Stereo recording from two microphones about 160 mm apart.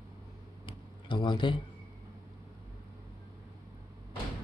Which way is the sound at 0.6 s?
30° left (ahead or behind).